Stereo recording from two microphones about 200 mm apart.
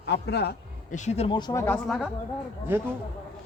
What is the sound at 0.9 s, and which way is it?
A woman's voice, 35° left (ahead or behind).